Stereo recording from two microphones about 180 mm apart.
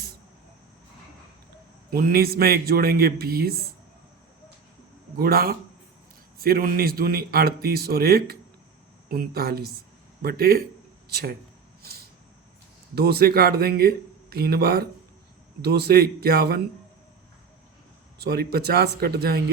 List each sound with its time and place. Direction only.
1.9 s a man's voice: 55° right (ahead or behind)
5.1 s a man's voice: 55° right (ahead or behind)
11.8 s a sound: 60° right (ahead or behind)
13.0 s a man's voice: 60° right (ahead or behind)
18.2 s a man's voice: 60° right (ahead or behind)